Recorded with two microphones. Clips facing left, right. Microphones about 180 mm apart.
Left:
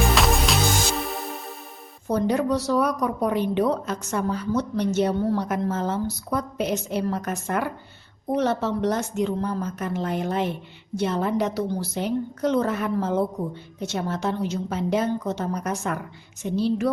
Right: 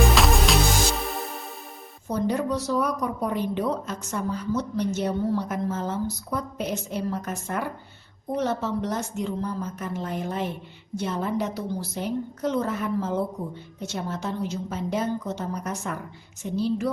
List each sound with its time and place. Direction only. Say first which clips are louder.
0.0 s music: right 1 dB; centre (ahead or behind)
2.0 s a woman's voice: left 3 dB; 70° left (ahead or behind)